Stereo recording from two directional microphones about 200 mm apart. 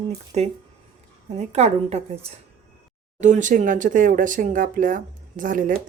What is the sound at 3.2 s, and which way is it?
Speech, 40° right (ahead or behind).